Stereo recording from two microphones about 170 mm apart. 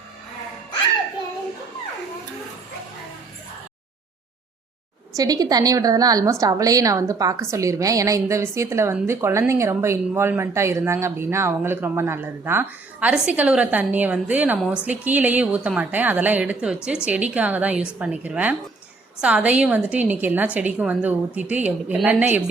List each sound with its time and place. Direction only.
5.1 s a woman's voice: 20° right (ahead or behind)